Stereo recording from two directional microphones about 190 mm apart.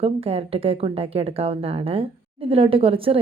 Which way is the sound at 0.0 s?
30° right (ahead or behind).